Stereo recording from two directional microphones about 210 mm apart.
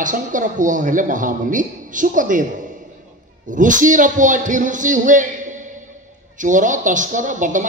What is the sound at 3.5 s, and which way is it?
A man's voice, 40° right (ahead or behind).